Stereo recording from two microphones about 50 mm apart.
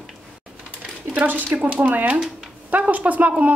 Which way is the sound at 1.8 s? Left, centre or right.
Right.